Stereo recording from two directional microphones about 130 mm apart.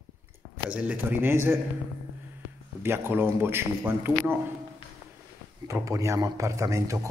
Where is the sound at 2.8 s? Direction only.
15° right (ahead or behind).